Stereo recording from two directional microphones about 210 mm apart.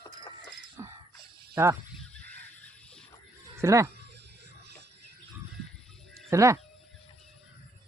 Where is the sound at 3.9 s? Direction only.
55° right (ahead or behind).